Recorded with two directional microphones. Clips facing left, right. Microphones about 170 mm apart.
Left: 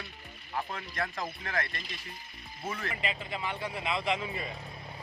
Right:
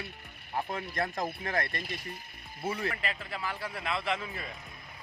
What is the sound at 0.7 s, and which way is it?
Speech, 40° right (ahead or behind).